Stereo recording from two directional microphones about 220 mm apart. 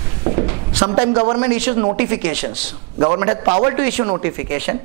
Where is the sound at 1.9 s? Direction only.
15° right (ahead or behind).